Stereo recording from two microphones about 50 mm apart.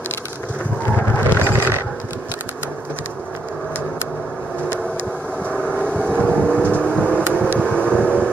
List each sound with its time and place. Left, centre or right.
1.3 s mechanisms: right
5.4 s vehicle: left